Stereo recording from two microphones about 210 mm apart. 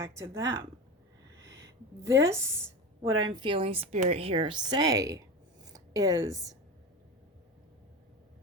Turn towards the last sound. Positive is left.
turn(degrees=-15)  # may be behind; listen again after turning